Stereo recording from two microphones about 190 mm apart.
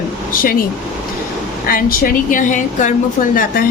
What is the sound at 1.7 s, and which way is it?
A woman's voice, 50° left (ahead or behind).